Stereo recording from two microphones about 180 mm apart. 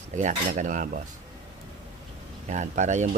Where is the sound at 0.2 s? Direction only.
40° right (ahead or behind).